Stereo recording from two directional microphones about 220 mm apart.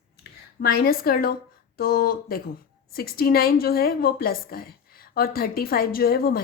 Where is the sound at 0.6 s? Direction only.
45° left (ahead or behind).